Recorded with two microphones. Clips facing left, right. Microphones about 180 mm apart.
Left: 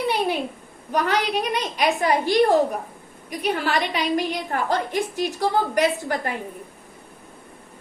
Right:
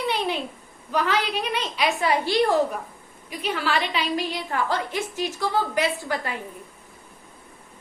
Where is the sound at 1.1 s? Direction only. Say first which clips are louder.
Left 3 dB; 15° left (ahead or behind).